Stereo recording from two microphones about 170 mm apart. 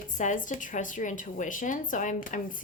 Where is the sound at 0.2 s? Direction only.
50° left (ahead or behind).